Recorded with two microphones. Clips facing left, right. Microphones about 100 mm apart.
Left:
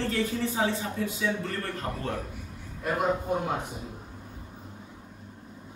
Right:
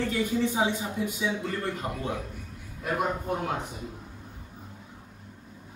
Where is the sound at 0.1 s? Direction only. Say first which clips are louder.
Right 2 dB; 15° right (ahead or behind).